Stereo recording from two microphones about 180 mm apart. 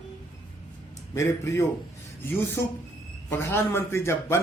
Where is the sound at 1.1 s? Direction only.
15° left (ahead or behind).